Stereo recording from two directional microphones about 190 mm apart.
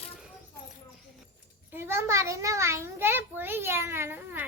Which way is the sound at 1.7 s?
10° right (ahead or behind).